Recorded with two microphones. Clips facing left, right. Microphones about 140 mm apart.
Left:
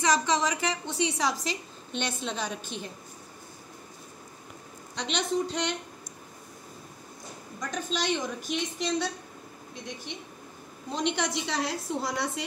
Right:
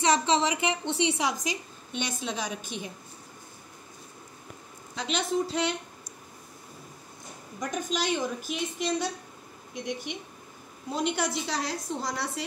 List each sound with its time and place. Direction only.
0.0 s a woman's voice: 30° right (ahead or behind); by 2.9 s 10° right (ahead or behind)
4.9 s a woman's voice: 5° right (ahead or behind)
7.8 s a woman's voice: 5° right (ahead or behind)
10.9 s a woman's voice: 5° right (ahead or behind)